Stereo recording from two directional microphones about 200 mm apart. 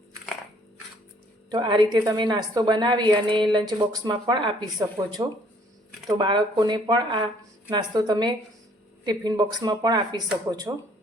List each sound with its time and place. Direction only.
1.5 s a woman's voice: 20° right (ahead or behind)